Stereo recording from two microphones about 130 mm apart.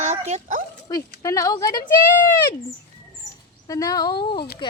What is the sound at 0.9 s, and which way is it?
Speech, 25° left (ahead or behind).